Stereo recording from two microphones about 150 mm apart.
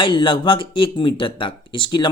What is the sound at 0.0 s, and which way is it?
Speech, 35° left (ahead or behind).